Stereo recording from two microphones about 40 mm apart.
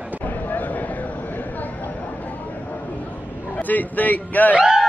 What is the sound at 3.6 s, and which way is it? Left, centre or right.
Speech, left.